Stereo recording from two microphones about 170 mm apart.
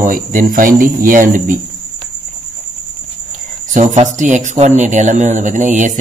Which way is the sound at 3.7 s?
45° right (ahead or behind).